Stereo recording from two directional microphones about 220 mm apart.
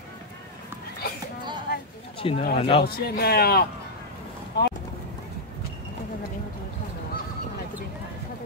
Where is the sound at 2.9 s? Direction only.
45° left (ahead or behind).